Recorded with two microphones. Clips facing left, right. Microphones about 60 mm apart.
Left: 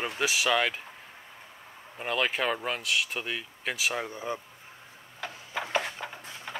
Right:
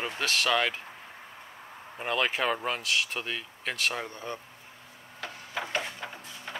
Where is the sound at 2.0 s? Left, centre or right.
Centre.